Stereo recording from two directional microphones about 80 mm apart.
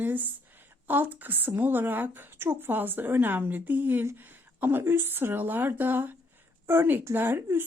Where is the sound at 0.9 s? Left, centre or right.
Right.